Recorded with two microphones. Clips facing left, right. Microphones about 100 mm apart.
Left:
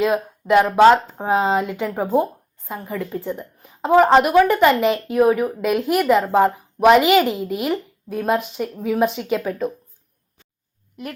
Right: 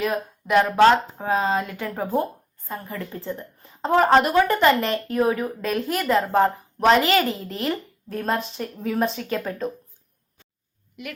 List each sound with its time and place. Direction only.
0.0 s a woman's voice: 20° left (ahead or behind)
11.0 s a woman's voice: 35° left (ahead or behind)